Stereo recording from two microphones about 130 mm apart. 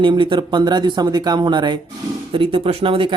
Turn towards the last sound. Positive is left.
turn(degrees=-40)  # may be behind; listen again after turning